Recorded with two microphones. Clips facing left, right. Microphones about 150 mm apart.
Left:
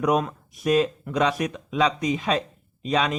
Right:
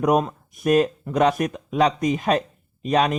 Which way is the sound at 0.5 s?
50° right (ahead or behind).